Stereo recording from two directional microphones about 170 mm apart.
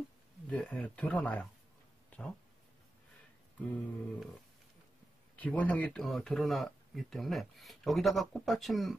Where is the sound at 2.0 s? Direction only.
10° left (ahead or behind).